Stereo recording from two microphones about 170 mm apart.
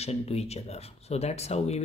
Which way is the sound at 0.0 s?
40° left (ahead or behind).